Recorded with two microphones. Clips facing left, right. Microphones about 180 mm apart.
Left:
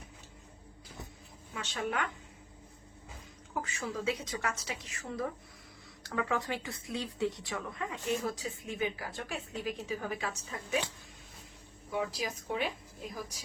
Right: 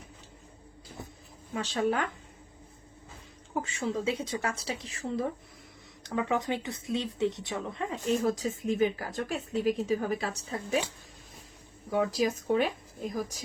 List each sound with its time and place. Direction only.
1.5 s speech: 35° right (ahead or behind)
3.5 s a woman's voice: 25° right (ahead or behind)
11.9 s speech: 45° right (ahead or behind)